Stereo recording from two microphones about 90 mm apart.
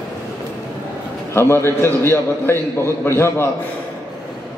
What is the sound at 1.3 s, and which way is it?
A man's voice, 30° left (ahead or behind).